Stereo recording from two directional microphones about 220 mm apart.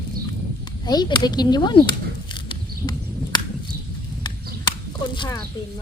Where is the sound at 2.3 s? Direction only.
20° left (ahead or behind).